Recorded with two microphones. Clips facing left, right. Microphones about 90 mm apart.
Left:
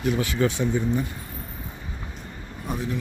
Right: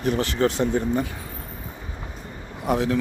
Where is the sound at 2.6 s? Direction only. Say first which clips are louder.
Right 8 dB; 90° right.